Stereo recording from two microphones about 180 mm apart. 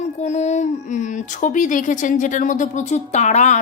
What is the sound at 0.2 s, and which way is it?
Speech, 40° left (ahead or behind).